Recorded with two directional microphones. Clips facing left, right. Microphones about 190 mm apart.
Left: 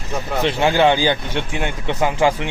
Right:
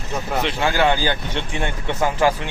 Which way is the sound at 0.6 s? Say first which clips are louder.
Left 4 dB; 20° left (ahead or behind).